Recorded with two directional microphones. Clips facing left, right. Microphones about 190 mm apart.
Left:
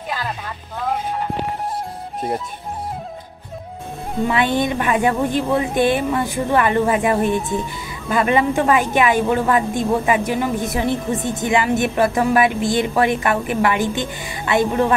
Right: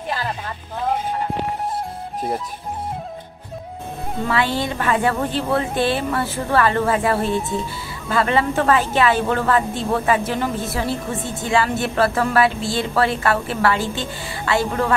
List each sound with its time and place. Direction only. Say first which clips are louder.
4.3 s a woman's voice: left 3 dB; 20° left (ahead or behind)